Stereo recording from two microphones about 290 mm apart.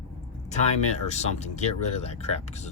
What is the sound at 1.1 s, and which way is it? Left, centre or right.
Speech, left.